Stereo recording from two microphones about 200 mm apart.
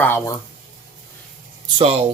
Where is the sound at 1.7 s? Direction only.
30° right (ahead or behind).